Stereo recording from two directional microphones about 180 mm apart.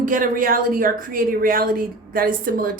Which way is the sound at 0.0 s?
50° right (ahead or behind).